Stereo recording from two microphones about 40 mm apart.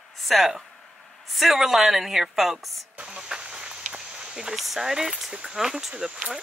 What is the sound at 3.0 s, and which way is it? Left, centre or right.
Vehicle, centre.